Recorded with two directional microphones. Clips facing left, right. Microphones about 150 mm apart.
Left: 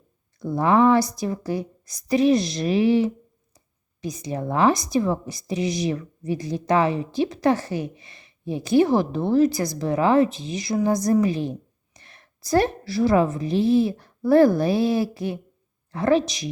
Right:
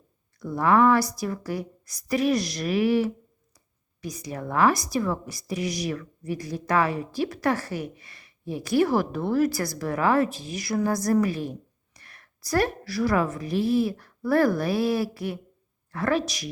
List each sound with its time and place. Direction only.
0.3 s a woman's voice: 25° left (ahead or behind)